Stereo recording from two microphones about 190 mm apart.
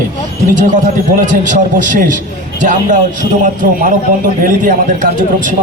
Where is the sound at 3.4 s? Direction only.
45° right (ahead or behind).